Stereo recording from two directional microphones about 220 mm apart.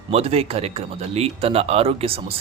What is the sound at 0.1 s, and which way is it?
A man's voice, 30° right (ahead or behind).